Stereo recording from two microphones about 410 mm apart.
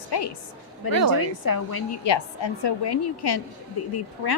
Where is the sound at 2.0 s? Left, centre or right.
Left.